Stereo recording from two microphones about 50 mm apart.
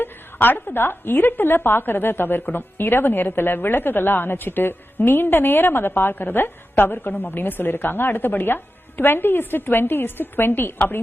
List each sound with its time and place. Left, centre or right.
0.0 s a woman's voice: left